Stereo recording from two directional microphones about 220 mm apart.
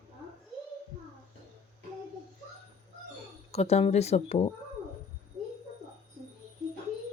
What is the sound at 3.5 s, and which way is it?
Speech, 30° left (ahead or behind).